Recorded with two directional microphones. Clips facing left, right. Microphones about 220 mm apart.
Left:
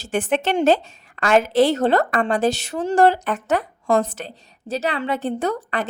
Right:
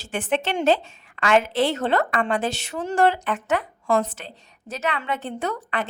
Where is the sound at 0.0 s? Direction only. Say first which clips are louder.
Left 4 dB; 40° left (ahead or behind).